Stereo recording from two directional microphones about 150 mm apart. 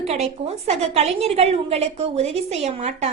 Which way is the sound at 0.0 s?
45° right (ahead or behind).